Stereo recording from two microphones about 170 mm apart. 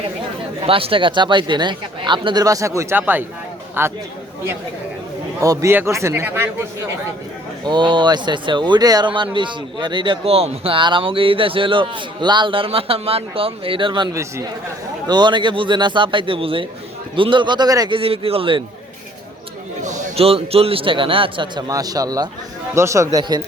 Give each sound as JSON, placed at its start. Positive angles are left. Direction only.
{"t": 0.6, "sound": "a man's voice", "side_deg": -35}
{"t": 5.4, "sound": "a man's voice", "side_deg": -20}
{"t": 7.6, "sound": "speech", "side_deg": -25}
{"t": 19.8, "sound": "a man's voice", "side_deg": -45}